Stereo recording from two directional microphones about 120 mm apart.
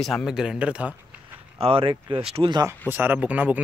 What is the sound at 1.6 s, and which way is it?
Speech, 50° right (ahead or behind).